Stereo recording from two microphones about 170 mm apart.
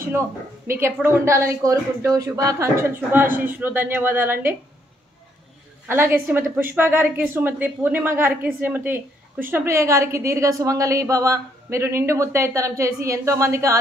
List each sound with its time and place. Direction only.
0.7 s speech: 15° right (ahead or behind)
5.9 s speech: 10° right (ahead or behind)